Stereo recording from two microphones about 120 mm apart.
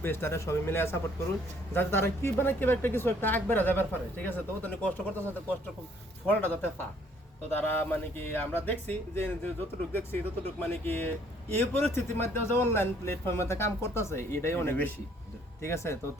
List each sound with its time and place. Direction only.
0.0 s a man's voice: 20° left (ahead or behind)